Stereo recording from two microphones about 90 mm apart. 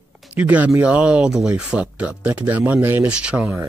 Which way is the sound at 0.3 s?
15° right (ahead or behind).